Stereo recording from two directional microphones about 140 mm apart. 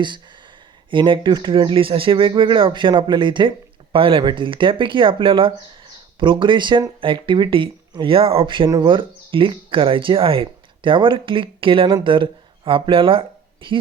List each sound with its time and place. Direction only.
0.9 s speech: 35° right (ahead or behind)